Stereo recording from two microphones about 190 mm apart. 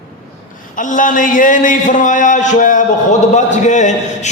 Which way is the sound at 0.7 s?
45° left (ahead or behind).